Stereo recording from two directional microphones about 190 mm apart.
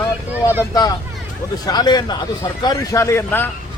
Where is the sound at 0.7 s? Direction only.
20° left (ahead or behind).